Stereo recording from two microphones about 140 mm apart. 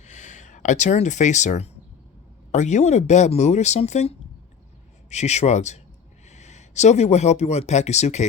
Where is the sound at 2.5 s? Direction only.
55° left (ahead or behind).